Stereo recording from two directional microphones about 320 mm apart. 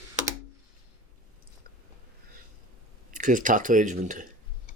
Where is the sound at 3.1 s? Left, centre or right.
Right.